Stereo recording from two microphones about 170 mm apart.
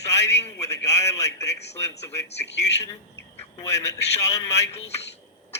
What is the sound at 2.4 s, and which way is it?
Speech, 90° left.